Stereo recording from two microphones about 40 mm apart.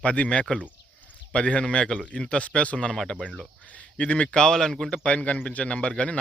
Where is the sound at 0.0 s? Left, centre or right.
Left.